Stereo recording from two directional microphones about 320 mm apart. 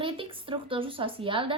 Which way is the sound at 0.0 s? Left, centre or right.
Centre.